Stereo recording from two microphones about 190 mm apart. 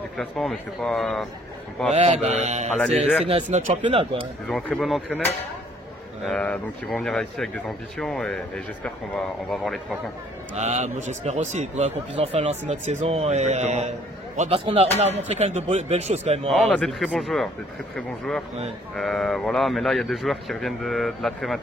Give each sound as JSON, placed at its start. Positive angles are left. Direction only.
{"t": 0.2, "sound": "speech", "side_deg": 0}
{"t": 1.9, "sound": "a man's voice", "side_deg": -35}
{"t": 4.5, "sound": "speech", "side_deg": 5}
{"t": 6.2, "sound": "speech", "side_deg": 5}
{"t": 10.5, "sound": "a man's voice", "side_deg": -35}
{"t": 16.4, "sound": "speech", "side_deg": 5}